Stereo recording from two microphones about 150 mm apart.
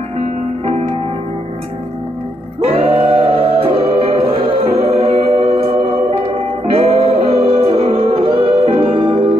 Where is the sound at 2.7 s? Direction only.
35° right (ahead or behind).